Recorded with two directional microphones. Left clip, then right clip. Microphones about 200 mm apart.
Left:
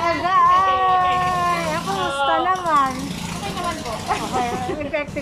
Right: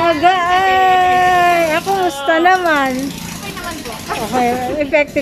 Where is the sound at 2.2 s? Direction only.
50° right (ahead or behind).